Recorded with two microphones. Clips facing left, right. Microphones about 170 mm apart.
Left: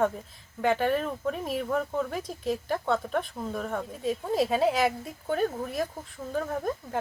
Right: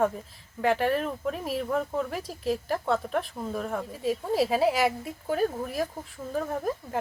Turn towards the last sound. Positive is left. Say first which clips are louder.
# right 1 dB
turn(degrees=0)  # may be behind; listen again after turning